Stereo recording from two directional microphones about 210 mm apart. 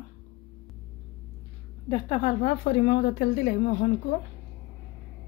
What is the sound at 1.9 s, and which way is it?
Speech, 30° left (ahead or behind).